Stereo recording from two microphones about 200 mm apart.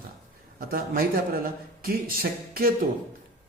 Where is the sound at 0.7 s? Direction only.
45° right (ahead or behind).